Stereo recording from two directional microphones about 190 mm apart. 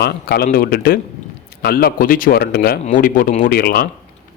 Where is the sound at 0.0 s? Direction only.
55° left (ahead or behind).